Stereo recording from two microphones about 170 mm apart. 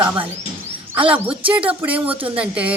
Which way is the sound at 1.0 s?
10° right (ahead or behind).